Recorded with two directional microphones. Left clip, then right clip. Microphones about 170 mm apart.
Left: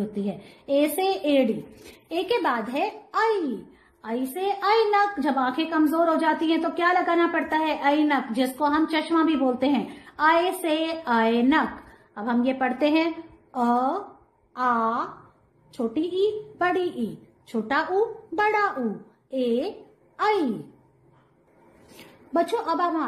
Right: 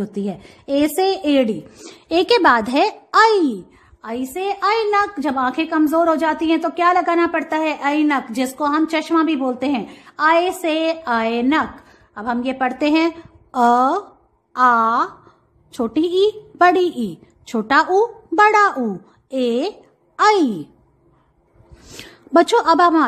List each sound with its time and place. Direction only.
0.1 s a woman's voice: 45° right (ahead or behind)
2.0 s speech: 55° right (ahead or behind)
4.0 s a woman's voice: 30° right (ahead or behind)
22.3 s speech: 65° right (ahead or behind)